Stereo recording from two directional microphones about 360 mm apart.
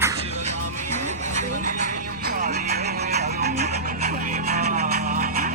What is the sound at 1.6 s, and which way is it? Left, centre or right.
Music, right.